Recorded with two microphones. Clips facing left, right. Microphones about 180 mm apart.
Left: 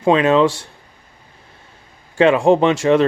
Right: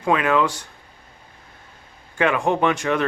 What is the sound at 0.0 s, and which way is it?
Speech, 25° left (ahead or behind).